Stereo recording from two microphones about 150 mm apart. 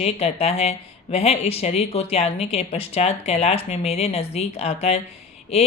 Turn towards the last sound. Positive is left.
turn(degrees=45)  # may be behind; listen again after turning